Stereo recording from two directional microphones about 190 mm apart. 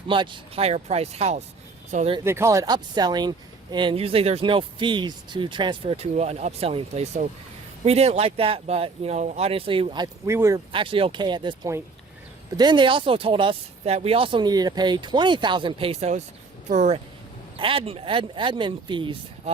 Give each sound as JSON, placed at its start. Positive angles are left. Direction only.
{"t": 0.1, "sound": "speech", "side_deg": -25}
{"t": 2.2, "sound": "speech", "side_deg": -15}
{"t": 10.7, "sound": "speech", "side_deg": -25}